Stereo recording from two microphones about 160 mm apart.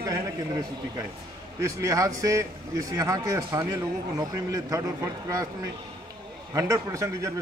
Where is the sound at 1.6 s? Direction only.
20° right (ahead or behind).